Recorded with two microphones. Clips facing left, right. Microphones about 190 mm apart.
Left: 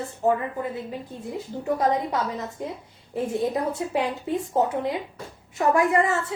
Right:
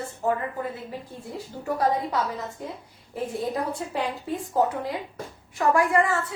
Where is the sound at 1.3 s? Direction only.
20° left (ahead or behind).